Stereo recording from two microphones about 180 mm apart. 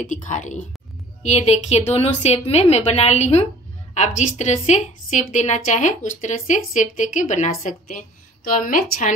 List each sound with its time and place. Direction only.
0.0 s a woman's voice: 45° left (ahead or behind)